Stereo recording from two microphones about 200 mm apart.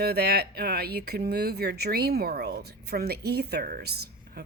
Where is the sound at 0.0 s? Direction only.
50° right (ahead or behind).